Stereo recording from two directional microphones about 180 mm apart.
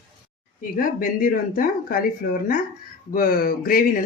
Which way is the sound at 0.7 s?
50° left (ahead or behind).